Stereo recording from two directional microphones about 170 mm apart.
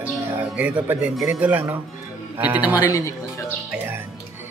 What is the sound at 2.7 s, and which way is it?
Speech, 20° left (ahead or behind).